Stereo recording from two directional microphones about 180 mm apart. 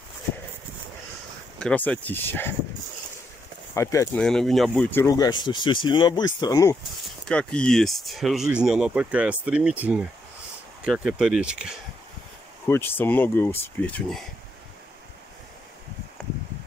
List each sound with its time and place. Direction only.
1.6 s speech: 5° left (ahead or behind)
3.7 s speech: 15° left (ahead or behind)
4.2 s speech: 5° left (ahead or behind)
4.9 s speech: 20° left (ahead or behind)
7.2 s speech: 5° left (ahead or behind)
12.6 s speech: 15° left (ahead or behind)